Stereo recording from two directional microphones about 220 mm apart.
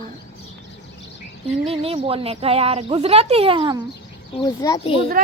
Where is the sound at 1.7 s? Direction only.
25° right (ahead or behind).